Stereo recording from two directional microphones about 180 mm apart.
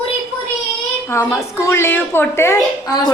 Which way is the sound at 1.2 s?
15° left (ahead or behind).